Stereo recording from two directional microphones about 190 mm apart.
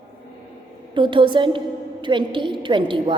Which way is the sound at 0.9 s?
25° right (ahead or behind).